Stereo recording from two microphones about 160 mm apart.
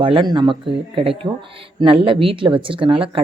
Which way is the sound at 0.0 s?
30° right (ahead or behind).